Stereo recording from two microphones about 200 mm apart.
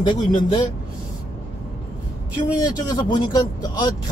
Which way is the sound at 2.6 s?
20° left (ahead or behind).